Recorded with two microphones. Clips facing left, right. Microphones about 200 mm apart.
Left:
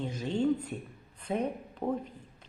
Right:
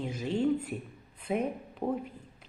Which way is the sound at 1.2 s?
5° right (ahead or behind).